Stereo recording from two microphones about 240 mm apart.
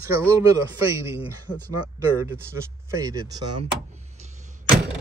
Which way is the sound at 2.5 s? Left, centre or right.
Centre.